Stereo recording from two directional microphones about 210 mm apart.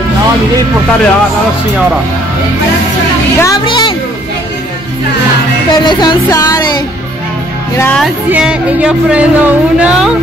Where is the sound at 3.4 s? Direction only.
20° left (ahead or behind).